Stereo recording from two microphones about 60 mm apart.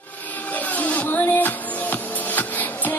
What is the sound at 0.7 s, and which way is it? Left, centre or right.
Music, left.